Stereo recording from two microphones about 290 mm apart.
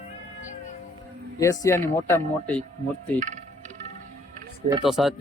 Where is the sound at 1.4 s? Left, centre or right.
Centre.